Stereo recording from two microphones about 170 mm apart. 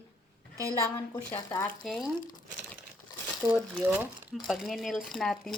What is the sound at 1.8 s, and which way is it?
Speech, centre (ahead or behind).